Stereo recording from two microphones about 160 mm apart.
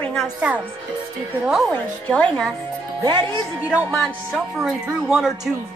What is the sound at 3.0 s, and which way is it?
Speech, 25° right (ahead or behind).